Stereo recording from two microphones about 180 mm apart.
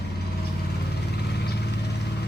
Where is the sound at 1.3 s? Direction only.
65° left (ahead or behind).